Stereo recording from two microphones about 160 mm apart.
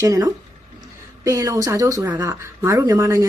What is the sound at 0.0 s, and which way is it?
Speech, 20° right (ahead or behind).